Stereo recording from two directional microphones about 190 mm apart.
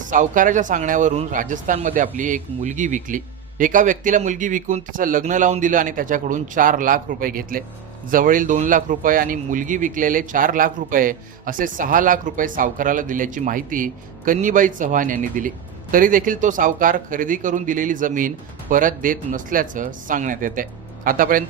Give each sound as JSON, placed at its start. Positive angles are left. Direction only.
{"t": 0.0, "sound": "speech", "side_deg": -45}